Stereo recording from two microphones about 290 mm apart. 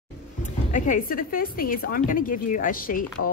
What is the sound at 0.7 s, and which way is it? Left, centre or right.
A woman's voice, left.